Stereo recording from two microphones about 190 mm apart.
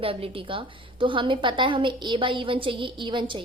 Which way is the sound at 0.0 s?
30° right (ahead or behind).